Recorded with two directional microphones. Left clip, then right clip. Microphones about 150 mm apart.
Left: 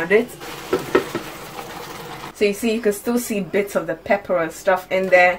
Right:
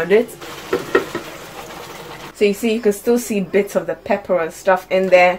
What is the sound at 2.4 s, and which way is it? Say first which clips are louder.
A woman's voice: right 3 dB; 25° right (ahead or behind).